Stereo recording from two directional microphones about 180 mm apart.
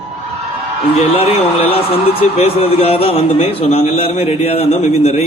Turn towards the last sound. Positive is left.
turn(degrees=35)  # may be behind; listen again after turning